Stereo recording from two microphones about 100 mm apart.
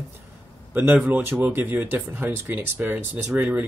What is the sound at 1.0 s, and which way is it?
Speech, 20° right (ahead or behind).